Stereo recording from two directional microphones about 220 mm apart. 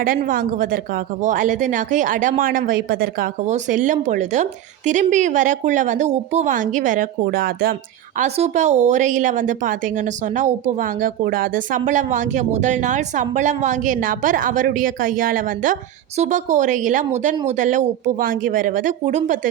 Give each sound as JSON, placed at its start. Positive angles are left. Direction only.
{"t": 0.0, "sound": "a woman's voice", "side_deg": -40}